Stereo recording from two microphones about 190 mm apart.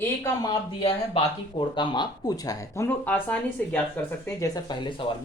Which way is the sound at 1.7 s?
25° left (ahead or behind).